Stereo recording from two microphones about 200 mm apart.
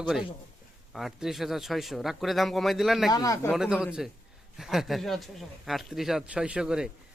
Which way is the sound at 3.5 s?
5° right (ahead or behind).